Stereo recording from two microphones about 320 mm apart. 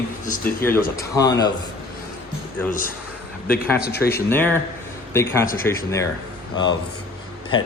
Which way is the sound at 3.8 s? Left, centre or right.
Left.